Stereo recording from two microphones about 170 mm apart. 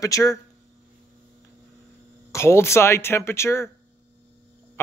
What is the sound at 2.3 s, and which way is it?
Speech, 15° left (ahead or behind).